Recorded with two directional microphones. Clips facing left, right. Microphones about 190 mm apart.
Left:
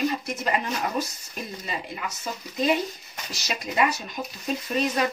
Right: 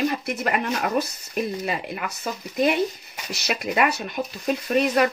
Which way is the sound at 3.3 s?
65° right (ahead or behind).